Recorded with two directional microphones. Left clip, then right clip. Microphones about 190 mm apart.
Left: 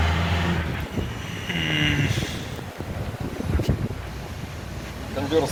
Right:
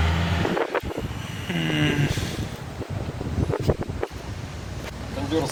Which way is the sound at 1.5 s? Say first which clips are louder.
Left 1 dB; 35° right (ahead or behind).